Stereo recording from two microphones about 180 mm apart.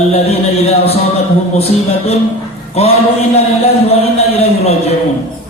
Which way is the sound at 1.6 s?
35° left (ahead or behind).